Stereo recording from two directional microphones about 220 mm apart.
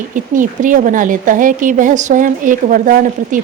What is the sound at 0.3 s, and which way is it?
Speech, 35° right (ahead or behind).